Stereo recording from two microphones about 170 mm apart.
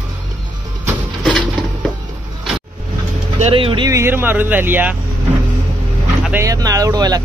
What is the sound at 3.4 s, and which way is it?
Speech, 30° right (ahead or behind).